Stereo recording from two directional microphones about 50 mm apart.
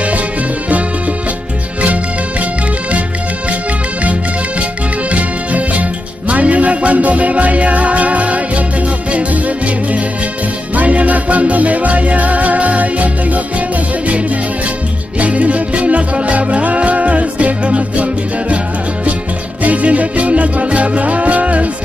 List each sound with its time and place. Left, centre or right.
4.0 s music: right
10.8 s music: right
15.1 s music: right
19.6 s music: right